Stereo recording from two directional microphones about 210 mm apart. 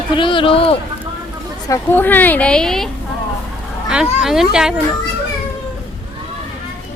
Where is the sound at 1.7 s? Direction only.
10° left (ahead or behind).